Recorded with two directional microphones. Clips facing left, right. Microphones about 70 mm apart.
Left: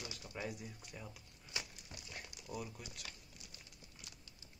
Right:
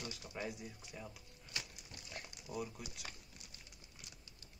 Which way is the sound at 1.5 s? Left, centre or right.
Centre.